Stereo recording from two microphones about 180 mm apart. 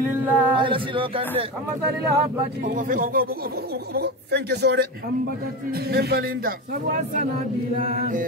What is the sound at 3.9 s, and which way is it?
Speech, 65° right (ahead or behind).